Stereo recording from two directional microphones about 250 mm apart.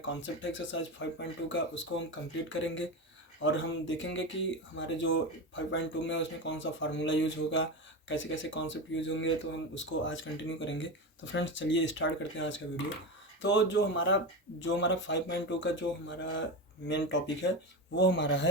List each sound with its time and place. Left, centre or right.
0.1 s speech: left